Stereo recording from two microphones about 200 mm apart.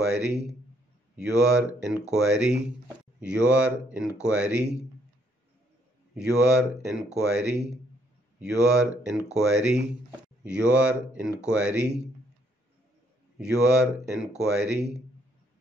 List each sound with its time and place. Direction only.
0.0 s speech: 5° right (ahead or behind)
6.1 s speech: 5° right (ahead or behind)
8.6 s speech: 5° right (ahead or behind)
13.4 s speech: 5° right (ahead or behind)